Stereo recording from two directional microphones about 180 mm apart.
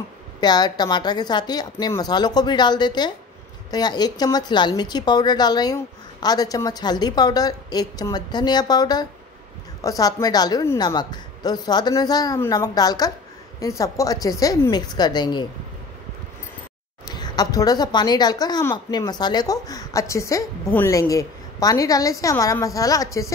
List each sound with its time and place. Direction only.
0.4 s a woman's voice: 25° left (ahead or behind)
17.0 s a woman's voice: 20° left (ahead or behind)